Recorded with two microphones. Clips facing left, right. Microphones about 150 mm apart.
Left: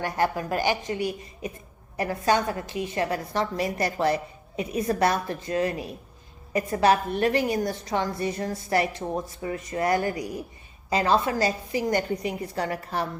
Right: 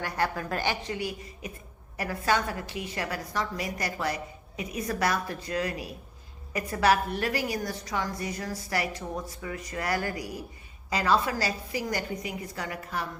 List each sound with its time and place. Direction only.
0.0 s a woman's voice: 20° left (ahead or behind)